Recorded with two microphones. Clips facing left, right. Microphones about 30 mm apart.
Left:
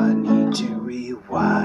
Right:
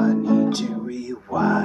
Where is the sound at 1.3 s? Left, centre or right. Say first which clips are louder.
Left 1 dB; left.